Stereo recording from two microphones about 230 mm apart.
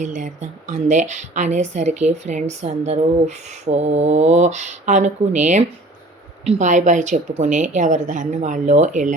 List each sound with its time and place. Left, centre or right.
0.2 s a woman's voice: right